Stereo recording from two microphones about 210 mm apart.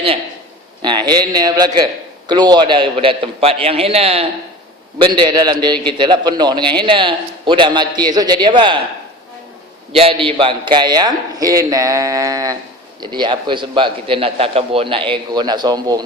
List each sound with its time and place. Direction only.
0.8 s a man's voice: 20° right (ahead or behind)
9.9 s a man's voice: 25° right (ahead or behind)